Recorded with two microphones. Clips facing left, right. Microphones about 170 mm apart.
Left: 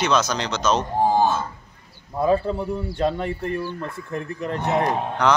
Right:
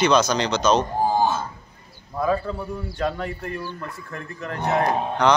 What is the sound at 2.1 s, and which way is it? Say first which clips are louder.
Speech: left 3 dB; 25° left (ahead or behind).